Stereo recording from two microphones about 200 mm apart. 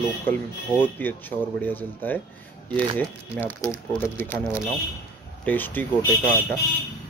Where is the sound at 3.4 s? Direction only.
5° left (ahead or behind).